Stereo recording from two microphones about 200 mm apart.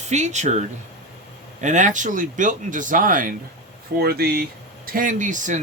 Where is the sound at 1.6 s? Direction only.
40° right (ahead or behind).